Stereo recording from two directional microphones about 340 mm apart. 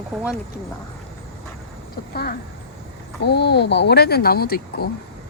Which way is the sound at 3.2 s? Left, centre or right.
Left.